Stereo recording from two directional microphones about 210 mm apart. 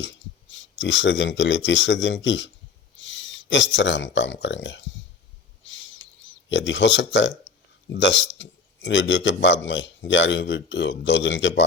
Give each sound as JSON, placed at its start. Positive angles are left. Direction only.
{"t": 0.0, "sound": "speech", "side_deg": 60}
{"t": 5.6, "sound": "bird", "side_deg": 60}
{"t": 6.5, "sound": "speech", "side_deg": 60}